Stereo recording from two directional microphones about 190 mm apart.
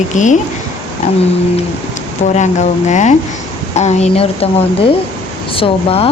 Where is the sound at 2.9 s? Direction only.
40° left (ahead or behind).